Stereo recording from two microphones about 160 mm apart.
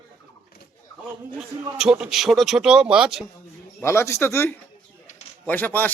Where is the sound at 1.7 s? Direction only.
5° right (ahead or behind).